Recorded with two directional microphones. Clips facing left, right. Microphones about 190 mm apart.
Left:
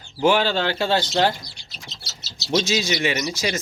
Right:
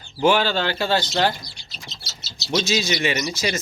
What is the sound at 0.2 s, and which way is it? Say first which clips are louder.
Speech: even; 15° left (ahead or behind).